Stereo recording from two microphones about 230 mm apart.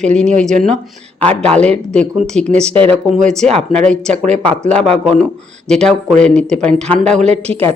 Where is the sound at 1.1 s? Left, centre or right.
Centre.